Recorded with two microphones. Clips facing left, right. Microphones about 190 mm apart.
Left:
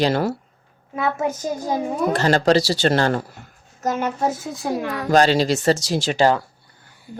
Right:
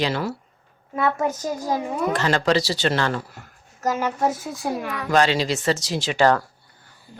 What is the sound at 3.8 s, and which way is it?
A woman's voice, 25° left (ahead or behind).